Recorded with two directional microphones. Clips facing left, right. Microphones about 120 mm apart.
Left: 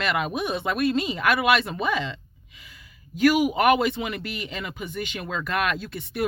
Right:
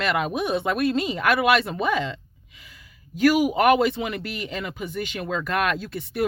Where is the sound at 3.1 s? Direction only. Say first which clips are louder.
Right 1 dB; 40° right (ahead or behind).